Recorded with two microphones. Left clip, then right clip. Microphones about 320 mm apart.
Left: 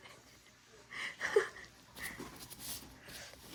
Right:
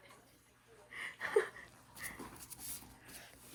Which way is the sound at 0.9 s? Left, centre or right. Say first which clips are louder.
Left 2 dB; centre.